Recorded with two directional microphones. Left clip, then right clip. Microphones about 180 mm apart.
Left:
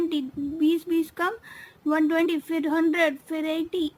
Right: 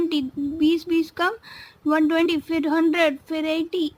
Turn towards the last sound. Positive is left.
turn(degrees=-25)  # may be behind; listen again after turning